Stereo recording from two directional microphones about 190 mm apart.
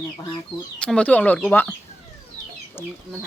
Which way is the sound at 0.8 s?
5° left (ahead or behind).